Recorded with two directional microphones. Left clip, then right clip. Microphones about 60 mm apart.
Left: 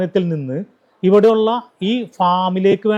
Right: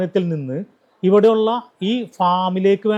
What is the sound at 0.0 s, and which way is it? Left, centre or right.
Speech, left.